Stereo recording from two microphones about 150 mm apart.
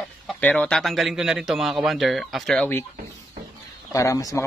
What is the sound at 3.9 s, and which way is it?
Speech, 20° left (ahead or behind).